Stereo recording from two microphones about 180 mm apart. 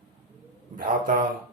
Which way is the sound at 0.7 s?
50° right (ahead or behind).